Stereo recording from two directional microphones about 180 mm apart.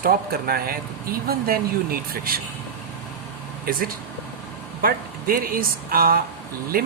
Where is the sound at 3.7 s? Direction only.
55° right (ahead or behind).